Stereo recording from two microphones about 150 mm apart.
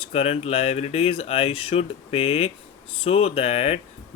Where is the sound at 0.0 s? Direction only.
45° left (ahead or behind).